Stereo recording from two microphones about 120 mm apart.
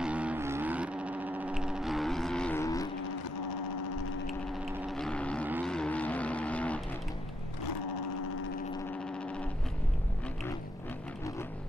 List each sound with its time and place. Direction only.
0.0 s a sound: 10° right (ahead or behind); by 2.5 s 5° left (ahead or behind)
2.5 s vehicle: 30° left (ahead or behind)
4.8 s vehicle: 5° left (ahead or behind)